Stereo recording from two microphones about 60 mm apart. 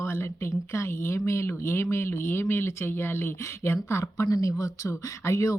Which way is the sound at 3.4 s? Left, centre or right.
Left.